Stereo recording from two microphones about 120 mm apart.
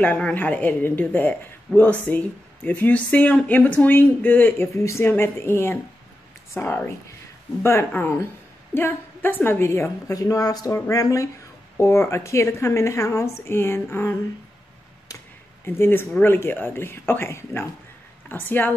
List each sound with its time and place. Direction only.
0.0 s a woman's voice: 10° left (ahead or behind)
15.6 s a woman's voice: 20° left (ahead or behind)